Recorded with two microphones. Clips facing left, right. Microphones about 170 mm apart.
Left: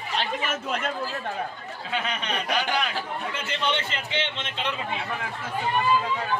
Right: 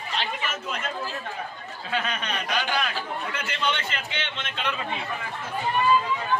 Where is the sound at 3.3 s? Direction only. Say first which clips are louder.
Left 2 dB; 25° left (ahead or behind).